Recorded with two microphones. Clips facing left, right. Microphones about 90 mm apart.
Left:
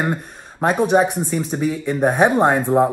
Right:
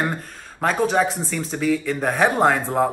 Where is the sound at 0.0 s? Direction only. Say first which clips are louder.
Left 3 dB; 15° left (ahead or behind).